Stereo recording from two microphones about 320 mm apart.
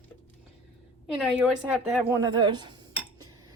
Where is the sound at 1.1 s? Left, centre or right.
Centre.